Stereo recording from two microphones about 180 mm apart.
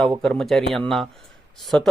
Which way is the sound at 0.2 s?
5° left (ahead or behind).